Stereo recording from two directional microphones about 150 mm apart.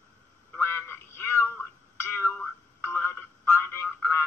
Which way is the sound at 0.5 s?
15° left (ahead or behind).